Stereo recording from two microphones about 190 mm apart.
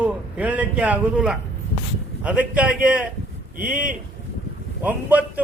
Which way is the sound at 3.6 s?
45° right (ahead or behind).